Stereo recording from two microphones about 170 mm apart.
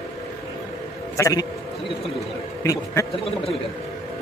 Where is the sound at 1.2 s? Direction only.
20° left (ahead or behind).